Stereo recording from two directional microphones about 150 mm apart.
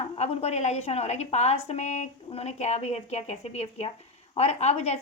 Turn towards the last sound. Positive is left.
turn(degrees=45)  # may be behind; listen again after turning